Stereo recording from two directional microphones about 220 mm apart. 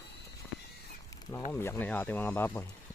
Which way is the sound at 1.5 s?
10° left (ahead or behind).